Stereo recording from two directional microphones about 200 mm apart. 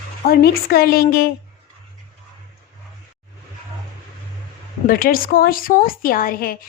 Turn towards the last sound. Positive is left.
turn(degrees=45)  # may be behind; listen again after turning